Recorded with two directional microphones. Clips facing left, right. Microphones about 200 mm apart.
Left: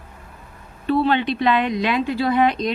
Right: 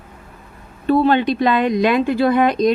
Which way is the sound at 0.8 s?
45° right (ahead or behind).